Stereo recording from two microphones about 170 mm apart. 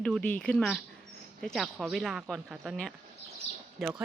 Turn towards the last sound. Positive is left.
turn(degrees=-5)  # may be behind; listen again after turning